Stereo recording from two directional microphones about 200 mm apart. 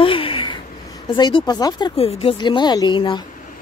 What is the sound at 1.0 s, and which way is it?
Speech, 25° left (ahead or behind).